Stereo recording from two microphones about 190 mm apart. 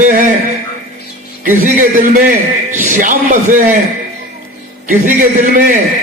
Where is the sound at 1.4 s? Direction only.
45° right (ahead or behind).